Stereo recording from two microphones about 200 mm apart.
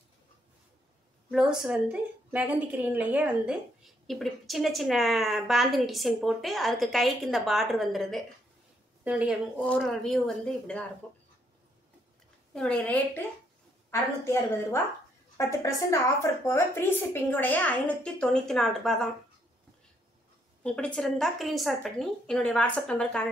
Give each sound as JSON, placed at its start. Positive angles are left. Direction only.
{"t": 1.3, "sound": "a woman's voice", "side_deg": -5}
{"t": 12.5, "sound": "a woman's voice", "side_deg": 5}
{"t": 20.6, "sound": "a woman's voice", "side_deg": 5}